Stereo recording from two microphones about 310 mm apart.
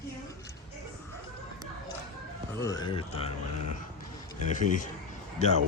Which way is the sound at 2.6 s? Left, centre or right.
Centre.